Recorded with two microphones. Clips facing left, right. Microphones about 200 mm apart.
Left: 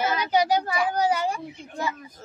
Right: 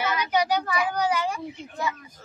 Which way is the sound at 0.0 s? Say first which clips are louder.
Left 2 dB; 35° left (ahead or behind).